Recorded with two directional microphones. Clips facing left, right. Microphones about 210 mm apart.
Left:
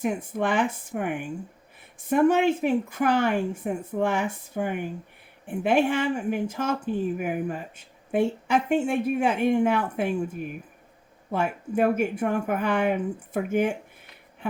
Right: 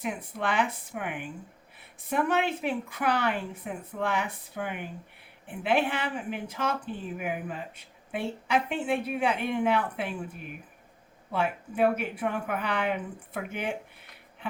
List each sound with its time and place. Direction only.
0.0 s speech: 50° left (ahead or behind)
11.3 s speech: 45° left (ahead or behind)